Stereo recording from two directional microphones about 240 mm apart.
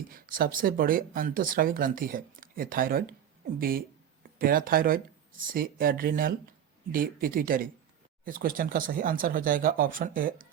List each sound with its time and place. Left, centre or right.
0.1 s speech: right